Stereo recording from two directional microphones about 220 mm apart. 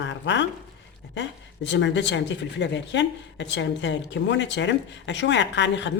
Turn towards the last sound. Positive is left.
turn(degrees=55)  # may be behind; listen again after turning